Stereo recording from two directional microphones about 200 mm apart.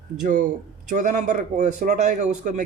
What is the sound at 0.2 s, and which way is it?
Speech, 40° right (ahead or behind).